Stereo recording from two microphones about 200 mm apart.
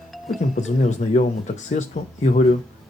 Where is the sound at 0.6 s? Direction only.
35° left (ahead or behind).